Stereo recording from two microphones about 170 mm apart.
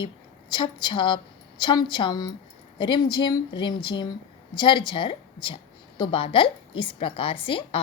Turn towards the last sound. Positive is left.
turn(degrees=30)  # may be behind; listen again after turning